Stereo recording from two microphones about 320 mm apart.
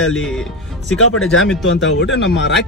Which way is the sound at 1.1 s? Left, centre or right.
Left.